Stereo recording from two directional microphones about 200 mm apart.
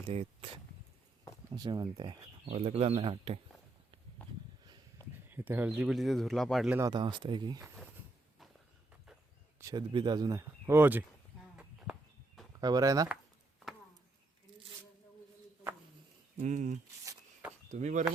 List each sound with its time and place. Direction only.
1.5 s speech: 20° right (ahead or behind)
2.5 s speech: 30° right (ahead or behind)
5.3 s speech: 10° right (ahead or behind)
6.7 s speech: 20° right (ahead or behind)
9.6 s speech: 20° right (ahead or behind)
11.5 s a sound: 5° right (ahead or behind)
12.5 s speech: 20° right (ahead or behind)
16.4 s speech: 40° right (ahead or behind)